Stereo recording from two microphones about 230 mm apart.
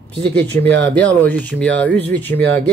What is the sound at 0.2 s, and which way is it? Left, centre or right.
A man's voice, centre.